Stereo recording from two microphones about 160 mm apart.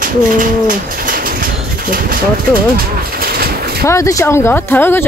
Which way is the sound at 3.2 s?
70° right (ahead or behind).